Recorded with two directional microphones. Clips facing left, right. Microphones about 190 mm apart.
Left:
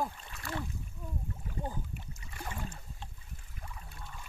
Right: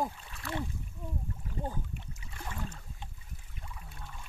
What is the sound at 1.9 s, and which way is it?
Boat, centre (ahead or behind).